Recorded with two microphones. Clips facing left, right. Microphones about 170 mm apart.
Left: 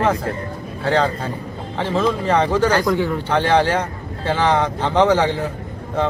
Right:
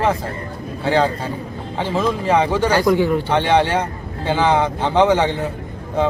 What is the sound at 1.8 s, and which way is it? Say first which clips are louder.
A man's voice: left 1 dB; 5° right (ahead or behind).